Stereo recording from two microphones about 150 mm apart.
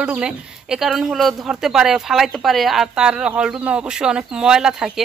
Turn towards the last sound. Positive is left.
turn(degrees=-5)  # may be behind; listen again after turning